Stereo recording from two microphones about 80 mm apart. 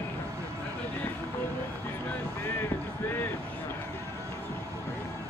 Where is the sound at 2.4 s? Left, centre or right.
Left.